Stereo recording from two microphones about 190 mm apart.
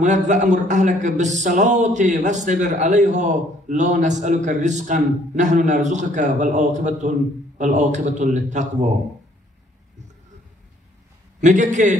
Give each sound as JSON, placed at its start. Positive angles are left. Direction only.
{"t": 0.0, "sound": "a man's voice", "side_deg": -40}
{"t": 11.4, "sound": "a man's voice", "side_deg": -40}